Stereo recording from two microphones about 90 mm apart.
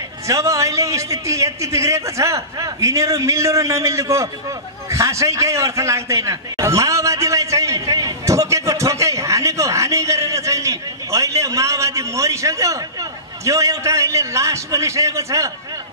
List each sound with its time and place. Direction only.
0.3 s a man's voice: 35° right (ahead or behind)
4.8 s a sound: 35° right (ahead or behind)
13.5 s a man's voice: 35° right (ahead or behind)